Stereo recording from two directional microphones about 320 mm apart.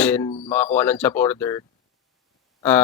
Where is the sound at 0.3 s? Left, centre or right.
Centre.